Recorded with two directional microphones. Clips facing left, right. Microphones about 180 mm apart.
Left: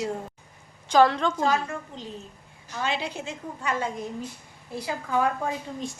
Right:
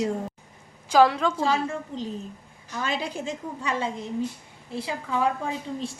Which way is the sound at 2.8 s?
45° right (ahead or behind).